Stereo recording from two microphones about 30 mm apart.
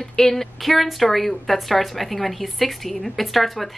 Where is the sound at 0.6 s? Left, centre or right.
Centre.